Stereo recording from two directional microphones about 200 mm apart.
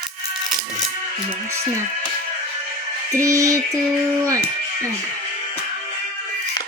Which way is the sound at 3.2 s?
15° right (ahead or behind).